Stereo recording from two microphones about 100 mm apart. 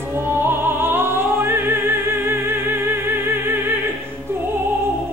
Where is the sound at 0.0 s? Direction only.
25° right (ahead or behind).